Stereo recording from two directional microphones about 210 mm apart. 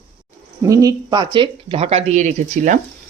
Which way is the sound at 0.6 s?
15° right (ahead or behind).